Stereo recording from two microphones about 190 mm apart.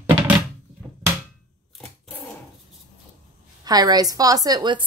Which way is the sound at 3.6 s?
20° right (ahead or behind).